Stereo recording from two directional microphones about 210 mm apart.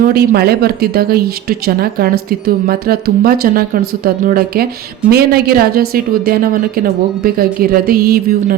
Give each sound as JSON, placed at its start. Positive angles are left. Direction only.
{"t": 0.0, "sound": "speech", "side_deg": -45}